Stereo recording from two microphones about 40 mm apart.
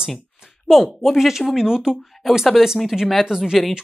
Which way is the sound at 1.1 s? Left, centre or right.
Centre.